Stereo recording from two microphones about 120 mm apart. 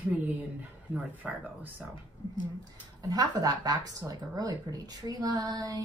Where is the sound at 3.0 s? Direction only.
35° right (ahead or behind).